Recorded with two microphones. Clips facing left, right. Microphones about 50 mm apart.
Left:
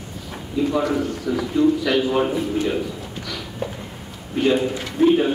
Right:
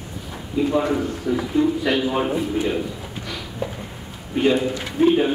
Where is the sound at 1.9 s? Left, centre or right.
Centre.